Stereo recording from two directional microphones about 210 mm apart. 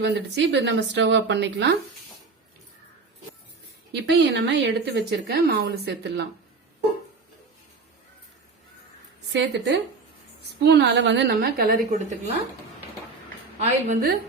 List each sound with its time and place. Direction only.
0.0 s speech: 55° right (ahead or behind)
3.9 s a woman's voice: 55° right (ahead or behind)
9.3 s a woman's voice: 55° right (ahead or behind)
13.6 s a woman's voice: 35° right (ahead or behind)